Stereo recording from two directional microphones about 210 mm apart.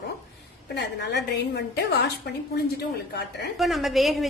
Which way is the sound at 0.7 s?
55° left (ahead or behind).